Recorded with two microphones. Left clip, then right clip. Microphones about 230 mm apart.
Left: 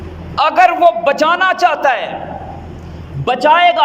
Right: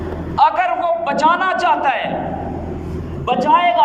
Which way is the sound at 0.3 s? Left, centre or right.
Left.